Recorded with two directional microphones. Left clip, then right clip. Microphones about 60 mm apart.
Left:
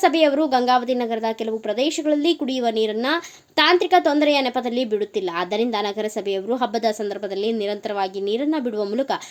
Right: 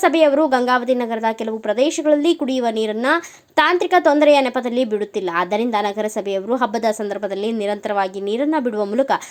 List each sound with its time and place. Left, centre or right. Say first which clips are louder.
0.0 s a woman's voice: right 3 dB; right
8.4 s a woman's voice: right 7 dB; right